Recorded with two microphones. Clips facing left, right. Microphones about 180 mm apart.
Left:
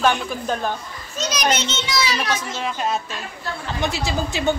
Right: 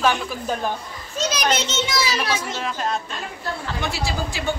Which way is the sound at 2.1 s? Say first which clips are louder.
Even; 10° right (ahead or behind).